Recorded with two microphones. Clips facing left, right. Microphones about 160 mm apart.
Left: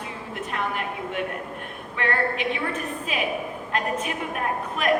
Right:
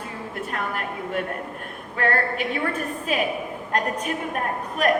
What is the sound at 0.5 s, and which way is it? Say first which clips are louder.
A woman's voice: left 2 dB; 45° right (ahead or behind).